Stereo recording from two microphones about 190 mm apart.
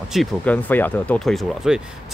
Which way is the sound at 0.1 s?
5° left (ahead or behind).